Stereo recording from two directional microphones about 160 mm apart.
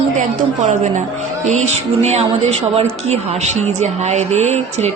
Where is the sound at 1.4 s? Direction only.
45° right (ahead or behind).